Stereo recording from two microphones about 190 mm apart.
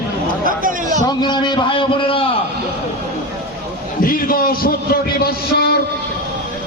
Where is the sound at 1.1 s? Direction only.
25° left (ahead or behind).